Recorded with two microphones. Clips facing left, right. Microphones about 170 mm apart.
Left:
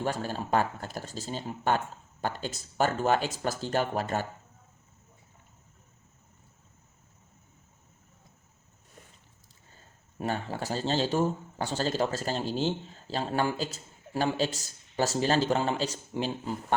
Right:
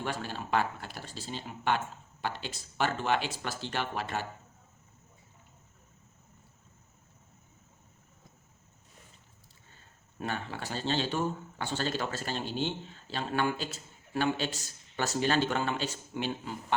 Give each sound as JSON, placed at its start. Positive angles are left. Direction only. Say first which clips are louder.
{"t": 0.0, "sound": "speech", "louder": "left 5 dB", "side_deg": 40}
{"t": 10.2, "sound": "speech", "louder": "left 5 dB", "side_deg": 40}